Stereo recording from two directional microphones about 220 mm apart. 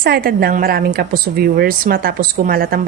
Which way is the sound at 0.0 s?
45° right (ahead or behind).